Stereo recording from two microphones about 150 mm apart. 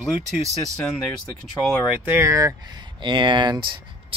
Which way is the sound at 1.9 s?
15° right (ahead or behind).